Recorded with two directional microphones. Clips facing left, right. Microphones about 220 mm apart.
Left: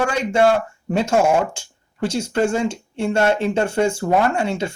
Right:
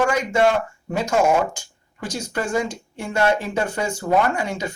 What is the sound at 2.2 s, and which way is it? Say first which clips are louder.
Speech: left 3 dB; 30° left (ahead or behind).